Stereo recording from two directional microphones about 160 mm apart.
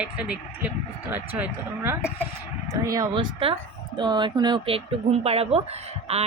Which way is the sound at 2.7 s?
25° right (ahead or behind).